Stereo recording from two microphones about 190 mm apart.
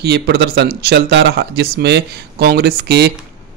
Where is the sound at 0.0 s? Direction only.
60° right (ahead or behind).